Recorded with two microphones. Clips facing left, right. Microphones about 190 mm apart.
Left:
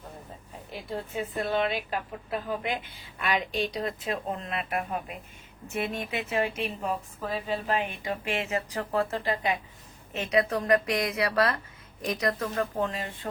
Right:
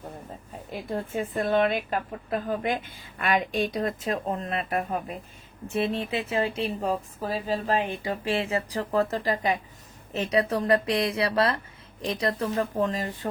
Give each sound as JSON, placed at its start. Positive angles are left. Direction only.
{"t": 0.7, "sound": "a woman's voice", "side_deg": -50}